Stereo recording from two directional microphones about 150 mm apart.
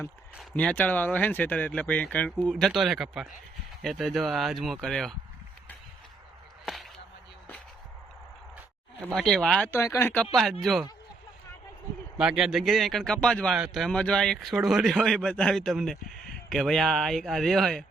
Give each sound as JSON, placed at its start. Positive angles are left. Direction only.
{"t": 0.5, "sound": "speech", "side_deg": 10}
{"t": 9.1, "sound": "speech", "side_deg": 0}
{"t": 9.7, "sound": "speech", "side_deg": 20}
{"t": 10.6, "sound": "speech", "side_deg": 0}
{"t": 12.1, "sound": "speech", "side_deg": -5}